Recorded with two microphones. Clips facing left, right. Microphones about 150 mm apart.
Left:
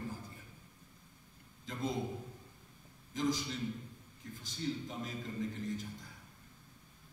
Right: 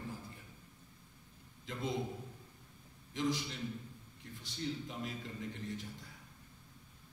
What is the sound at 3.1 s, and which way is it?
Speech, 40° left (ahead or behind).